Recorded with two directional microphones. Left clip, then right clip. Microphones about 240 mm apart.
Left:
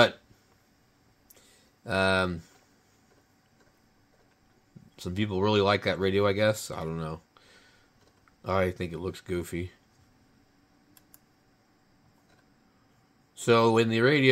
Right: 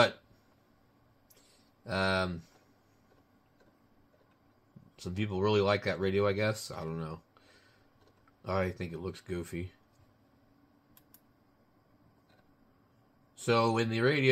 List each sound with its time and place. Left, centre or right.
1.9 s speech: left
4.9 s speech: left
13.5 s speech: left